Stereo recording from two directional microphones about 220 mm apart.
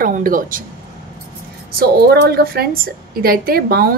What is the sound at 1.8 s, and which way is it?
A woman's voice, 45° right (ahead or behind).